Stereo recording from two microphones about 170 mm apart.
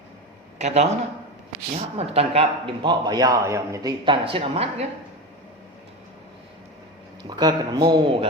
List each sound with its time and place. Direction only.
0.6 s a woman's voice: 40° right (ahead or behind)
2.0 s a man's voice: 35° right (ahead or behind); by 3.9 s 15° right (ahead or behind)
4.0 s a woman's voice: 30° right (ahead or behind)
7.3 s a man's voice: 25° right (ahead or behind)